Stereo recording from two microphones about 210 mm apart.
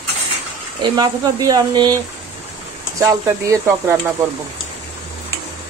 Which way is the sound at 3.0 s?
15° right (ahead or behind).